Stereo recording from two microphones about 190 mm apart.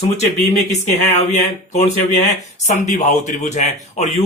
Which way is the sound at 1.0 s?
40° left (ahead or behind).